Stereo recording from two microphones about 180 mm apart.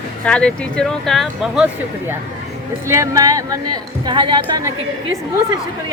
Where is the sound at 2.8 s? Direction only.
15° right (ahead or behind).